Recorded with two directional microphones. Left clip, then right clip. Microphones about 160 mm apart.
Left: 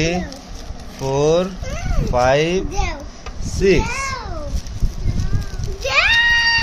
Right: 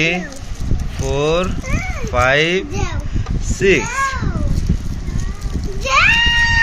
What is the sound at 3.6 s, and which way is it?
Speech, 10° left (ahead or behind).